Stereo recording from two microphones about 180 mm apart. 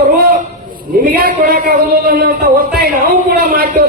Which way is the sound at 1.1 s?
55° right (ahead or behind).